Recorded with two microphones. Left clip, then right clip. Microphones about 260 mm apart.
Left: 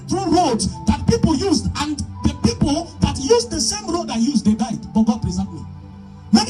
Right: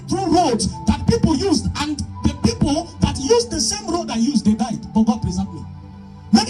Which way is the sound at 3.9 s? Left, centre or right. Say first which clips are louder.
Even; centre.